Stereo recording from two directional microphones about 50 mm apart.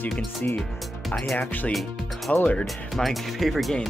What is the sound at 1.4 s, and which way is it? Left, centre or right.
Speech, left.